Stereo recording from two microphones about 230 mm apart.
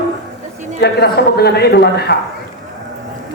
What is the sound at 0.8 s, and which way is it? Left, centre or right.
A man's voice, left.